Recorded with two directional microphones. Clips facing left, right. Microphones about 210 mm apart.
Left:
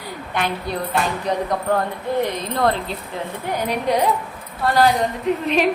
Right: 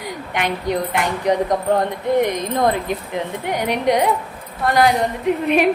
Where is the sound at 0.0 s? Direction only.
15° right (ahead or behind).